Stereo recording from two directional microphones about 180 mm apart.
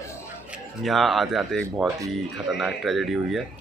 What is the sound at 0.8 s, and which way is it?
Speech, centre (ahead or behind).